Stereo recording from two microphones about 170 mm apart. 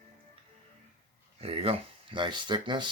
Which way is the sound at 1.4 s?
35° right (ahead or behind).